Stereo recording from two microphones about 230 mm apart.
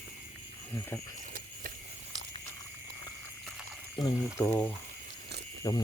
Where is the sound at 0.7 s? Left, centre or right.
Centre.